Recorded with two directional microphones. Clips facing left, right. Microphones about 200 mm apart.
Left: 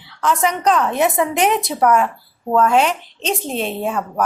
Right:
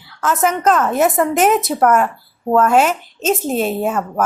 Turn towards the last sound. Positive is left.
turn(degrees=-5)  # may be behind; listen again after turning